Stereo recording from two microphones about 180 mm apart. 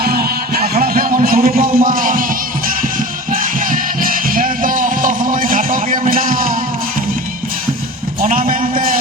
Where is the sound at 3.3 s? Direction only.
50° right (ahead or behind).